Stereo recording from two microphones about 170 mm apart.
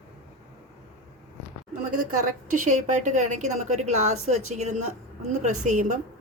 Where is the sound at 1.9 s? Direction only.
50° right (ahead or behind).